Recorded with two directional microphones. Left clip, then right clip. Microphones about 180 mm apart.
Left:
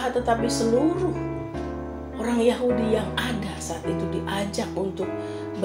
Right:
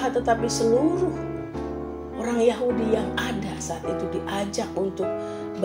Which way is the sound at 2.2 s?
35° right (ahead or behind).